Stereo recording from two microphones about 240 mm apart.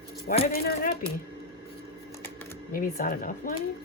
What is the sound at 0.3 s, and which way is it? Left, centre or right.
Speech, left.